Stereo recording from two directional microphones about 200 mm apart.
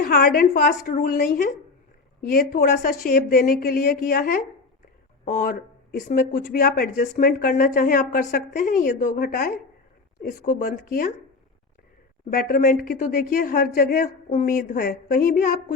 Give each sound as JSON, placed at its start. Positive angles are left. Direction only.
{"t": 0.0, "sound": "speech", "side_deg": 50}
{"t": 12.3, "sound": "speech", "side_deg": 45}